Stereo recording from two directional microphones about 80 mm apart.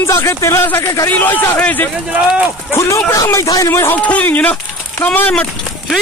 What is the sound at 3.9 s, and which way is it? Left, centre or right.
Speech, centre.